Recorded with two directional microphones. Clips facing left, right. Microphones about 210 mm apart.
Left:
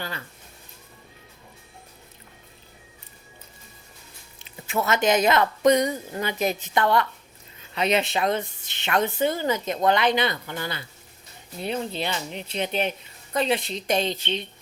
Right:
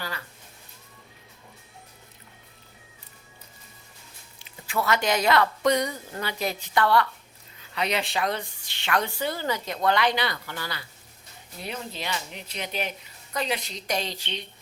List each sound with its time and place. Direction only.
4.4 s speech: 25° left (ahead or behind)